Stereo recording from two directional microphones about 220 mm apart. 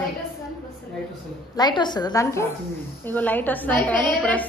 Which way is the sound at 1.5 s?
20° left (ahead or behind).